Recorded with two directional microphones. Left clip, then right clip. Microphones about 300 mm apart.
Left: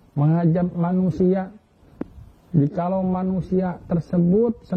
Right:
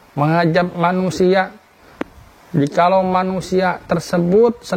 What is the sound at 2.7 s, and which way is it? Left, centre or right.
A man's voice, centre.